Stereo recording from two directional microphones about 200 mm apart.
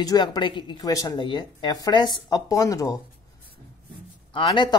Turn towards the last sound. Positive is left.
turn(degrees=25)  # may be behind; listen again after turning